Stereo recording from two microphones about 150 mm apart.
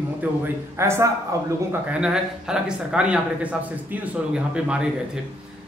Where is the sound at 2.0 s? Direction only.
5° right (ahead or behind).